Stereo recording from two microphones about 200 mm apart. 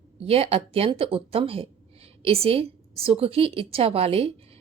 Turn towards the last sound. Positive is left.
turn(degrees=-30)  # may be behind; listen again after turning